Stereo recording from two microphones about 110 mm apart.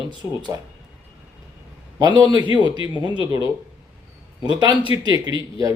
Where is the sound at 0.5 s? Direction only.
30° right (ahead or behind).